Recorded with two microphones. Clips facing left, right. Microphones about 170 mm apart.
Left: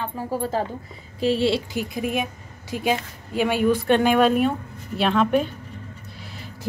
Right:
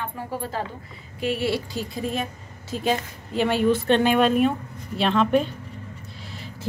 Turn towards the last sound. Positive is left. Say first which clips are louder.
# even
turn(degrees=5)  # may be behind; listen again after turning